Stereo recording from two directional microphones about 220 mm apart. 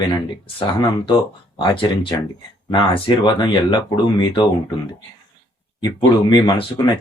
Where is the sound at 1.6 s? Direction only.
25° left (ahead or behind).